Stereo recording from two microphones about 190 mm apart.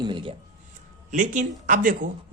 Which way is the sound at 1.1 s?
40° right (ahead or behind).